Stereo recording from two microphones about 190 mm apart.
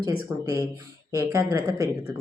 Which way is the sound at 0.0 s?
15° right (ahead or behind).